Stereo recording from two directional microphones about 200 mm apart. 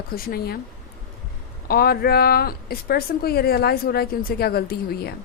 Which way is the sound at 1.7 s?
50° left (ahead or behind).